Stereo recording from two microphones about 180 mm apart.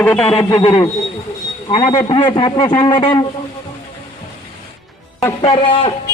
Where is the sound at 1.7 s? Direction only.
25° left (ahead or behind).